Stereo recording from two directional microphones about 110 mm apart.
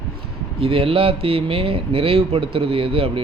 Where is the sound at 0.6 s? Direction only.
60° right (ahead or behind).